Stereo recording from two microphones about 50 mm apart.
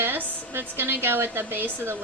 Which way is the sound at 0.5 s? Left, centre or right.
Right.